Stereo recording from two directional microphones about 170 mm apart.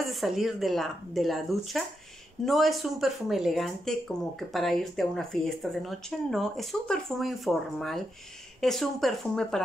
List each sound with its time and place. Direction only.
0.0 s speech: centre (ahead or behind)